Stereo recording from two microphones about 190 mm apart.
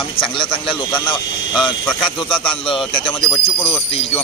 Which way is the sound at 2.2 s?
25° left (ahead or behind).